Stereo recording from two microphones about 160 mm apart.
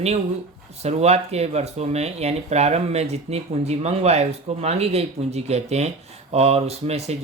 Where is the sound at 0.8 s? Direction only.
40° right (ahead or behind).